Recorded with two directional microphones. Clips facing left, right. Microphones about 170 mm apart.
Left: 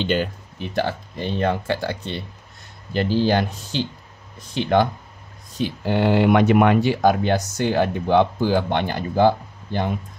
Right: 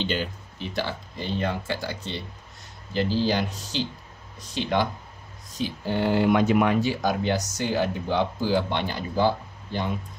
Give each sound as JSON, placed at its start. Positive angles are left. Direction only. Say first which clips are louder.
{"t": 0.0, "sound": "speech", "louder": "left 6 dB", "side_deg": 55}
{"t": 5.6, "sound": "speech", "louder": "left 5 dB", "side_deg": 70}